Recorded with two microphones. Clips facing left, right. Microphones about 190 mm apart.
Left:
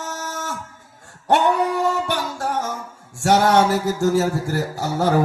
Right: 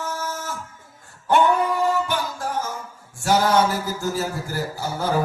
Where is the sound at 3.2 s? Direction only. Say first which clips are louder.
Left 3 dB; 75° left (ahead or behind).